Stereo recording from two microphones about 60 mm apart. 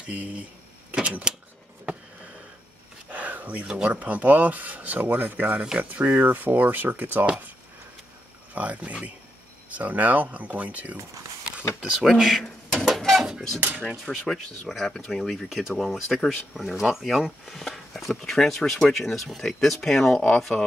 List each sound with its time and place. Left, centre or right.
0.0 s speech: right
0.9 s a sound: centre
3.1 s a sound: right
3.7 s speech: right
8.5 s speech: right
12.0 s speech: centre
12.4 s a sound: centre
13.6 s speech: right
14.0 s speech: centre